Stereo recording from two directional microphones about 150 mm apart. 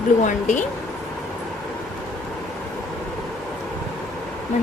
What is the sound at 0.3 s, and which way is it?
Speech, 55° left (ahead or behind).